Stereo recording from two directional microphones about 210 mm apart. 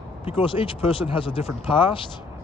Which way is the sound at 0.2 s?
25° left (ahead or behind).